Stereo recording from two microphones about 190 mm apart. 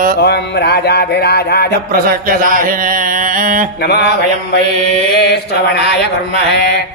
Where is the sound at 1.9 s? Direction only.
45° right (ahead or behind).